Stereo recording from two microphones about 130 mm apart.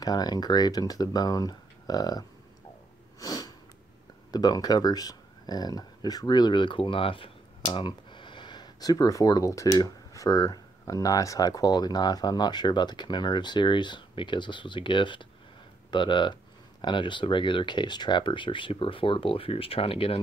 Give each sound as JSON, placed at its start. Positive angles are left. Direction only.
{"t": 0.0, "sound": "speech", "side_deg": 30}
{"t": 3.2, "sound": "sniff", "side_deg": 25}
{"t": 4.3, "sound": "speech", "side_deg": 30}